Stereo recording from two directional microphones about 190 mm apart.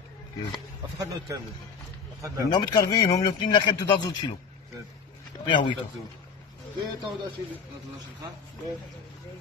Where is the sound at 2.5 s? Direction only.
20° left (ahead or behind).